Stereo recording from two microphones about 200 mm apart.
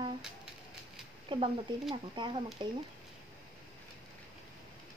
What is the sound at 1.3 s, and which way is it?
Speech, 25° right (ahead or behind).